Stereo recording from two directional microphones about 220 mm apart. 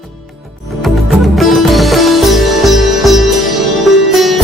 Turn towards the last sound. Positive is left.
turn(degrees=0)  # may be behind; listen again after turning